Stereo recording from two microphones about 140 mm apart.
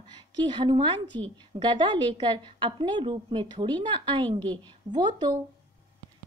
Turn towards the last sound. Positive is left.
turn(degrees=-30)  # may be behind; listen again after turning